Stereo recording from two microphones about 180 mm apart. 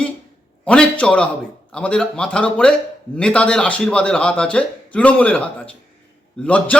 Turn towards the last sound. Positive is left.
turn(degrees=5)  # may be behind; listen again after turning